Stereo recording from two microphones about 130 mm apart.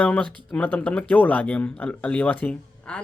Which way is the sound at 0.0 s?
10° left (ahead or behind).